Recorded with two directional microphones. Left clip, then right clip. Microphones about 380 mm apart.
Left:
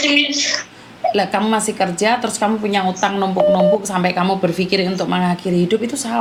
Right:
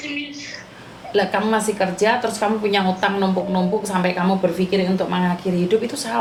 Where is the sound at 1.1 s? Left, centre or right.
Left.